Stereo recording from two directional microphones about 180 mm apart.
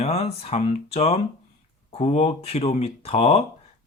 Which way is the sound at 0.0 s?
35° left (ahead or behind).